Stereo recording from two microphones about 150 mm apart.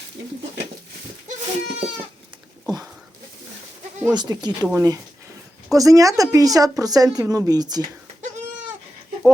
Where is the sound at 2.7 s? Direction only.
25° right (ahead or behind).